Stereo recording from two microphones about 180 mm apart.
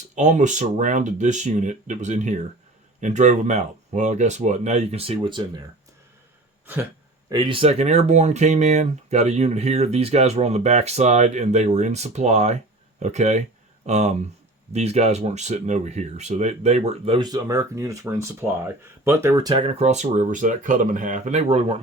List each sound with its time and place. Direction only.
0.2 s speech: 40° right (ahead or behind)
7.3 s speech: 25° right (ahead or behind)
19.6 s speech: 40° right (ahead or behind)